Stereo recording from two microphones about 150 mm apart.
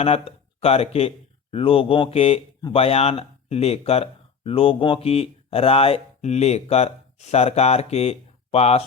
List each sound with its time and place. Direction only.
0.0 s speech: 40° left (ahead or behind)